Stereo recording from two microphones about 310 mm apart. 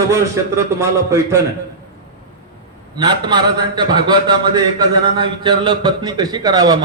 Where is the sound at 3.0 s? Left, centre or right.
Centre.